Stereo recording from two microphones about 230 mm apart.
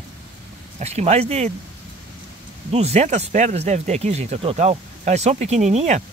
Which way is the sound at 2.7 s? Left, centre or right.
Right.